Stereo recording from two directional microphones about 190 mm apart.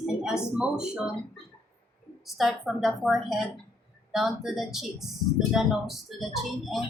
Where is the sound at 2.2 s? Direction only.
Centre (ahead or behind).